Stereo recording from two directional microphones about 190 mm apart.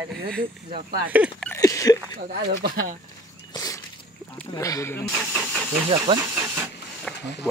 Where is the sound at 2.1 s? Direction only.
60° right (ahead or behind).